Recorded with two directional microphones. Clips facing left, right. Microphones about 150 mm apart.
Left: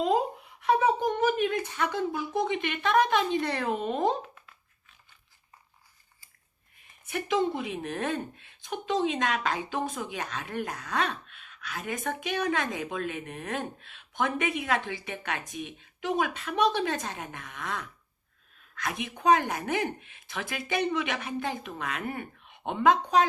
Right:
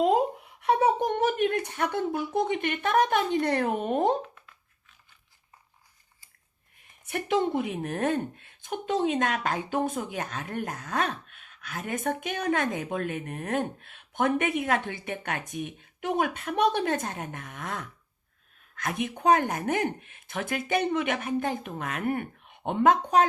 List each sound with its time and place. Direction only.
0.6 s a sound: 60° right (ahead or behind)
2.5 s speech: 50° right (ahead or behind)
7.1 s speech: 50° right (ahead or behind)